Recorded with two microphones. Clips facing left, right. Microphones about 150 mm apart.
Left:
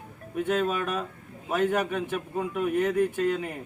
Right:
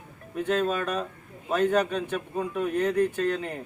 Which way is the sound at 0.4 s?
15° left (ahead or behind).